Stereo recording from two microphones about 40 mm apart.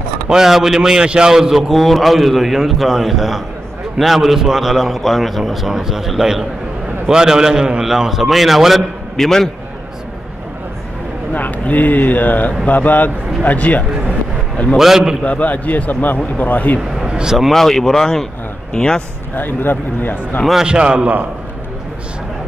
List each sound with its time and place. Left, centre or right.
0.3 s a man's voice: centre
1.3 s a man's voice: centre
9.1 s a man's voice: centre
11.3 s speech: left
14.8 s a man's voice: centre
15.2 s a man's voice: left
17.1 s vehicle: centre
17.5 s speech: centre
18.7 s speech: left
19.3 s speech: left
20.6 s a man's voice: right